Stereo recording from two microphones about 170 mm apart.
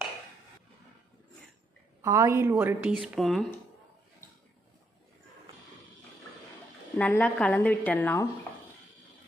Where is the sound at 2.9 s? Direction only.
Centre (ahead or behind).